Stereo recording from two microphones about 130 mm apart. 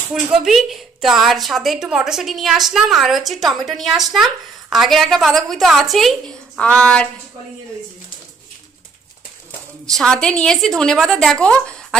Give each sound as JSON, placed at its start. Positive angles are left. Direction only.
{"t": 0.1, "sound": "a woman's voice", "side_deg": -5}
{"t": 9.8, "sound": "a woman's voice", "side_deg": 5}